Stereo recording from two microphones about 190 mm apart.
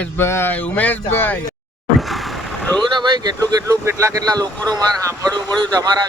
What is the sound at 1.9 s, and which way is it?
Vehicle, centre (ahead or behind).